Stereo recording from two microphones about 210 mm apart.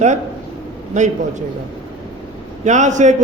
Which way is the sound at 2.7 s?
35° right (ahead or behind).